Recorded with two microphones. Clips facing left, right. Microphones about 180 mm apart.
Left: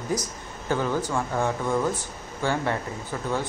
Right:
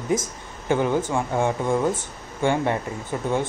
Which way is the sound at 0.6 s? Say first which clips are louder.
Right 4 dB; 20° right (ahead or behind).